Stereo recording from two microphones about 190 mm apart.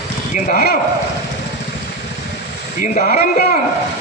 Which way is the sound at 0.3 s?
45° left (ahead or behind).